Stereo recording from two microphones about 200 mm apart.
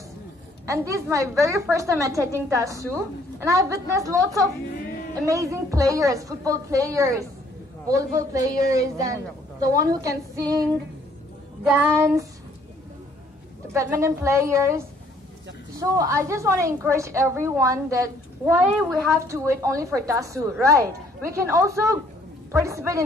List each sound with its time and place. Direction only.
0.7 s a woman's voice: 15° right (ahead or behind)
11.6 s a woman's voice: 10° right (ahead or behind)
13.7 s a woman's voice: 15° right (ahead or behind)
18.6 s speech: centre (ahead or behind)
19.1 s a woman's voice: 15° right (ahead or behind)